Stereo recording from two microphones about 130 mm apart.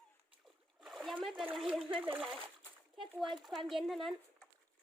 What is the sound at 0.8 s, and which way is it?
Splash, centre (ahead or behind).